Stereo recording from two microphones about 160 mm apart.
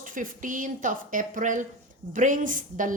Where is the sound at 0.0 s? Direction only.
55° right (ahead or behind).